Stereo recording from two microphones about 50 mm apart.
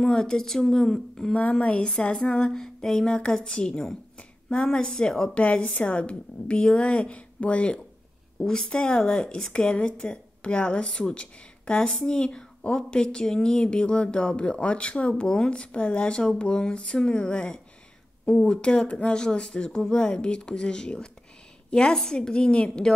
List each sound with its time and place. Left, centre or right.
0.0 s speech: centre
1.6 s a woman's voice: left
1.9 s speech: centre
5.3 s a woman's voice: left